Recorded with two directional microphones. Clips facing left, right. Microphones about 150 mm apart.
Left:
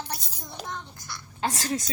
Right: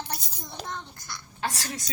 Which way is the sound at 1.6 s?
40° left (ahead or behind).